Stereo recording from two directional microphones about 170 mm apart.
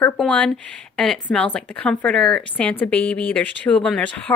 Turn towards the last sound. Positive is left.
turn(degrees=10)  # may be behind; listen again after turning